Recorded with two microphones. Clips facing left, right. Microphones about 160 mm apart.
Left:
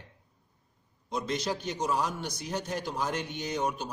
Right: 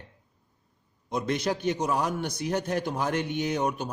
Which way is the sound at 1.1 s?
55° right (ahead or behind).